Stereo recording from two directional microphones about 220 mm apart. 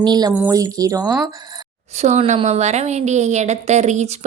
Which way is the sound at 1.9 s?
30° right (ahead or behind).